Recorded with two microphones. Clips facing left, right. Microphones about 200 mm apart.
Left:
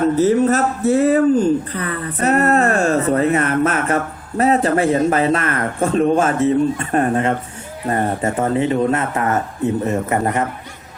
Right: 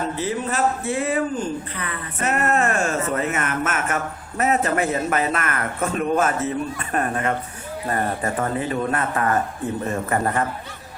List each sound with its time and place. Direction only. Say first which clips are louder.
0.2 s speech: left 6 dB; 40° left (ahead or behind); by 10.4 s 20° left (ahead or behind)